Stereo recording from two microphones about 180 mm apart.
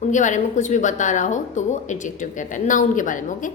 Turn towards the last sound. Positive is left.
turn(degrees=45)  # may be behind; listen again after turning